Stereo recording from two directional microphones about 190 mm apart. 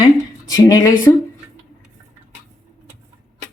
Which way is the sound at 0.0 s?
20° left (ahead or behind).